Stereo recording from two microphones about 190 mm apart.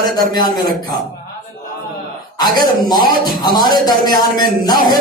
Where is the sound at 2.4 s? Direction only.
20° left (ahead or behind).